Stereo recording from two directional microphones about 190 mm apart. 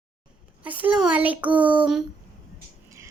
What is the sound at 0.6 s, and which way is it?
A woman's voice, 10° right (ahead or behind).